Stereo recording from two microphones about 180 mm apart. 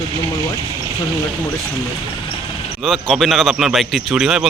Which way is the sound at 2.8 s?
Centre (ahead or behind).